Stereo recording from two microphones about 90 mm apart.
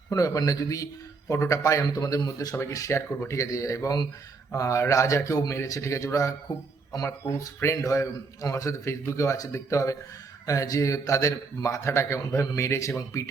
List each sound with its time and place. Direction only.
0.1 s a man's voice: 40° left (ahead or behind)